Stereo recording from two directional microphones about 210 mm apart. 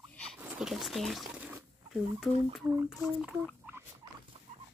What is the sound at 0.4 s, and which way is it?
Speech, 5° right (ahead or behind).